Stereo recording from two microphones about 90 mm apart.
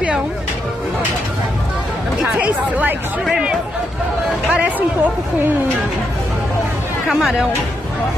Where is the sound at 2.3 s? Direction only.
15° right (ahead or behind).